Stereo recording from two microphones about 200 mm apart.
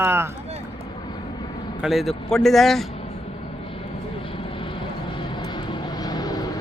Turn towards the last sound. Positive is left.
turn(degrees=20)  # may be behind; listen again after turning